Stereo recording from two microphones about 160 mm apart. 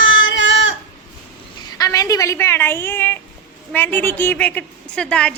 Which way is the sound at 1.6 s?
25° left (ahead or behind).